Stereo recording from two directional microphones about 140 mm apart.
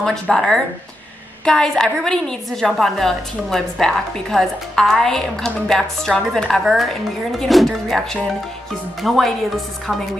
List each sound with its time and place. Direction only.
0.0 s a woman's voice: centre (ahead or behind)